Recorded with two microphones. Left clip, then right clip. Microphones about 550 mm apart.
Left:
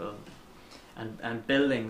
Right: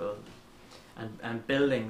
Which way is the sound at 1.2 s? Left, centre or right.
Left.